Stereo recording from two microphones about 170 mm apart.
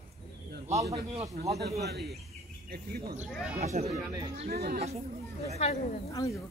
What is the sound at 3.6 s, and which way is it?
Speech, 40° right (ahead or behind).